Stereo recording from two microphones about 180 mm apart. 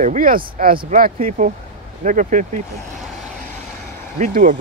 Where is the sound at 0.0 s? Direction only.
50° right (ahead or behind).